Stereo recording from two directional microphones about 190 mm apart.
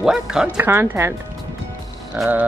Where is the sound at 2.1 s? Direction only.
10° right (ahead or behind).